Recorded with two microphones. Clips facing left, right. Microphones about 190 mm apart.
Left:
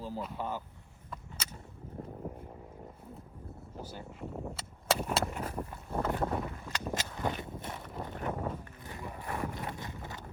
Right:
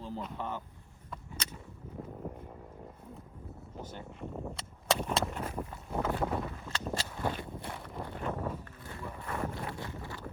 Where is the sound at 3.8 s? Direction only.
10° left (ahead or behind).